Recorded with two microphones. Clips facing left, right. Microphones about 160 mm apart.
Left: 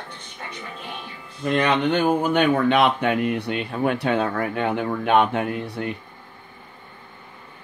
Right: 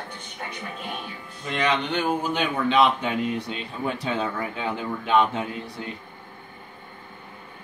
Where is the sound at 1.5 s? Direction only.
55° left (ahead or behind).